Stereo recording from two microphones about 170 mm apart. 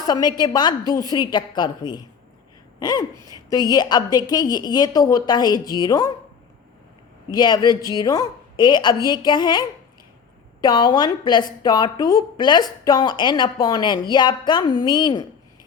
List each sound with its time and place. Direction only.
0.0 s speech: 25° left (ahead or behind)
3.7 s speech: 25° left (ahead or behind)
7.3 s speech: 25° left (ahead or behind)